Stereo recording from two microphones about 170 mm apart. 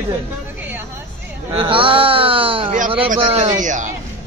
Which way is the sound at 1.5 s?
30° right (ahead or behind).